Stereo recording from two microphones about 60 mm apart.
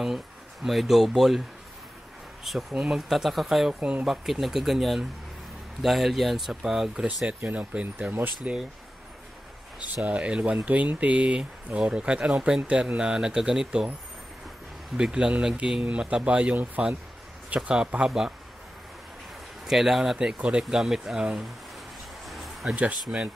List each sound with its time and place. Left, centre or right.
0.7 s speech: centre
2.7 s speech: centre
3.1 s speech: centre
7.2 s speech: right
10.0 s speech: centre
15.0 s speech: centre
17.6 s speech: centre
19.6 s speech: centre
22.2 s a sound: centre
22.8 s speech: right